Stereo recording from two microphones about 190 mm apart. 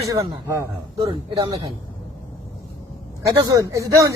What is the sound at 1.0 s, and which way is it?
Speech, 25° right (ahead or behind).